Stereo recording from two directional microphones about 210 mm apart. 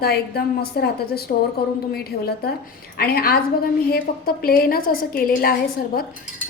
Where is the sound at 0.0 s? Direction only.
50° left (ahead or behind).